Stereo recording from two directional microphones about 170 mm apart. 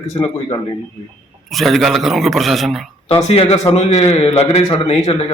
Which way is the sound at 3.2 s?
35° left (ahead or behind).